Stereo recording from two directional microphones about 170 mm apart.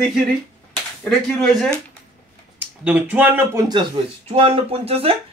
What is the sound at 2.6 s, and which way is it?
Speech, 10° right (ahead or behind).